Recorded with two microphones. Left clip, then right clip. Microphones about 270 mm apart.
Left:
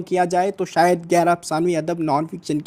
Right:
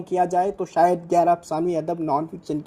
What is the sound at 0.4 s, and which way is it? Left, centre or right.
Speech, left.